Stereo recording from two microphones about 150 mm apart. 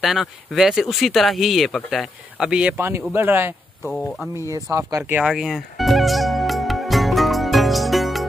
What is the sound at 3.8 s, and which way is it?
Speech, 15° left (ahead or behind).